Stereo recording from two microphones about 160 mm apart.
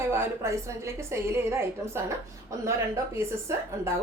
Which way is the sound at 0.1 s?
15° right (ahead or behind).